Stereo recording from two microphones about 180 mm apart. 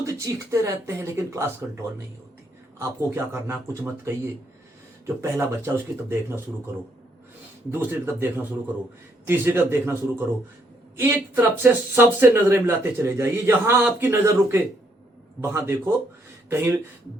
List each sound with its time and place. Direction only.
0.0 s speech: 15° right (ahead or behind)
2.7 s speech: 15° right (ahead or behind)
7.7 s speech: 10° right (ahead or behind)